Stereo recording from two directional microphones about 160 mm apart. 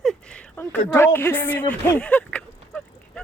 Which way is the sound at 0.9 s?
15° left (ahead or behind).